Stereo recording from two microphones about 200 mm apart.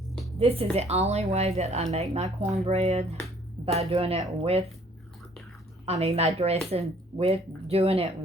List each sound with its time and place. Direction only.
0.3 s a woman's voice: 30° right (ahead or behind)
5.8 s a woman's voice: 30° right (ahead or behind)